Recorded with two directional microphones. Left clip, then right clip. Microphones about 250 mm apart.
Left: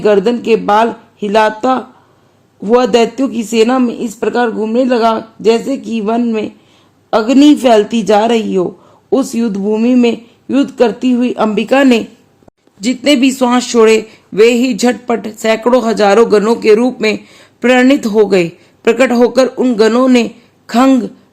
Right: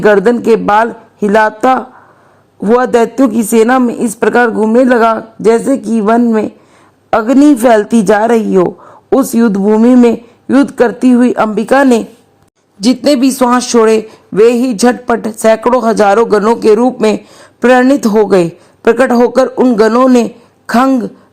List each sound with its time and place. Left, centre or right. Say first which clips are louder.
0.0 s speech: right 3 dB; centre